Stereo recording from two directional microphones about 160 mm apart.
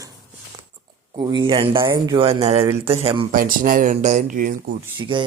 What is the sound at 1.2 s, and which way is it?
Speech, 30° right (ahead or behind).